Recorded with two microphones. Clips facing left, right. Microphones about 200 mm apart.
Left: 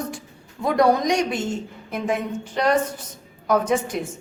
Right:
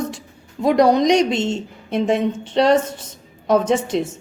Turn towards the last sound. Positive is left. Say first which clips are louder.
# right 4 dB
turn(degrees=-25)  # may be behind; listen again after turning